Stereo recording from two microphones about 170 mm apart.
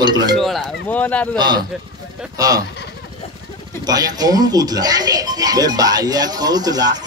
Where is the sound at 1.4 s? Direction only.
25° right (ahead or behind).